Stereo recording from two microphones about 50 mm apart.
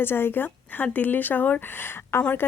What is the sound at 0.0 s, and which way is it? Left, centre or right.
Speech, left.